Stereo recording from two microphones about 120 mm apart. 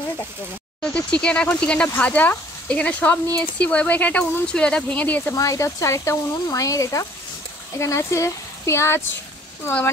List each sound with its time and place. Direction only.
0.9 s speech: 10° left (ahead or behind)
5.3 s speech: 25° left (ahead or behind)